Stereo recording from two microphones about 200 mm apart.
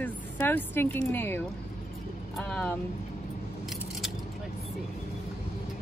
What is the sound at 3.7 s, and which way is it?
Keys jangling, centre (ahead or behind).